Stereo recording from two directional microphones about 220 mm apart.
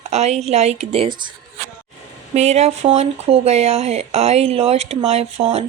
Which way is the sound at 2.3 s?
30° right (ahead or behind).